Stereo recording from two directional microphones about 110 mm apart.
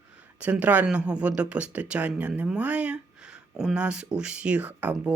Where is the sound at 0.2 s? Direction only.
10° right (ahead or behind).